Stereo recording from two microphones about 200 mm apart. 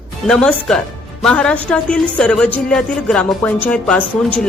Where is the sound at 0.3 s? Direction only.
5° left (ahead or behind).